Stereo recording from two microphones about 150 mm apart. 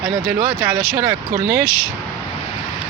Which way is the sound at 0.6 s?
15° right (ahead or behind).